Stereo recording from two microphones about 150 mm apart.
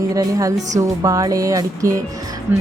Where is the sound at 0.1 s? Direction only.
25° right (ahead or behind).